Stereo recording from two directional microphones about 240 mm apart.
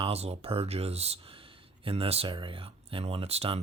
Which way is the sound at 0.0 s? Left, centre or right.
Right.